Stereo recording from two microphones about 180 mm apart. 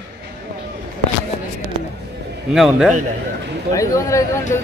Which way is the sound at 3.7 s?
15° left (ahead or behind).